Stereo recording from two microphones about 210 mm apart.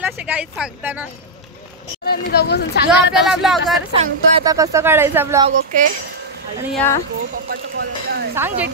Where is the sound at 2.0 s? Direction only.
50° left (ahead or behind).